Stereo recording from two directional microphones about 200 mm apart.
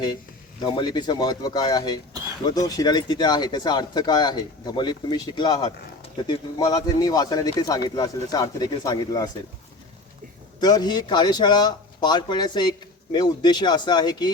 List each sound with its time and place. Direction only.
0.6 s speech: 20° left (ahead or behind)
10.6 s speech: 20° left (ahead or behind)